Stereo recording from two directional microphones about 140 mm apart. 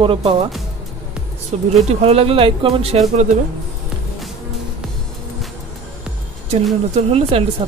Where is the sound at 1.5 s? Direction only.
50° right (ahead or behind).